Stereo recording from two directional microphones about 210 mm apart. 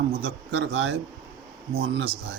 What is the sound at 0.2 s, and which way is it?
Speech, 55° right (ahead or behind).